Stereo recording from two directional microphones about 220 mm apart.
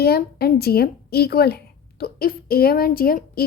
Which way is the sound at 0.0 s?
45° left (ahead or behind).